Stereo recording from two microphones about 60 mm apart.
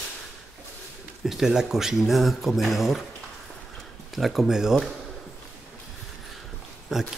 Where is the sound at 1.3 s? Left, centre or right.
Centre.